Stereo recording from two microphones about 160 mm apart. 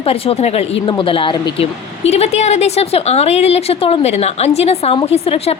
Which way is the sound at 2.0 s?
40° left (ahead or behind).